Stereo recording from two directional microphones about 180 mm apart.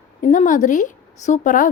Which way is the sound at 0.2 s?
45° left (ahead or behind).